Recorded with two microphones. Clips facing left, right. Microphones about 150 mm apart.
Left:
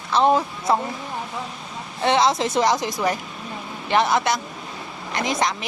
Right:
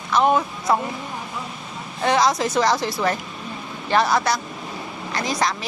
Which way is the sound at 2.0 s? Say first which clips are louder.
Even; 25° left (ahead or behind).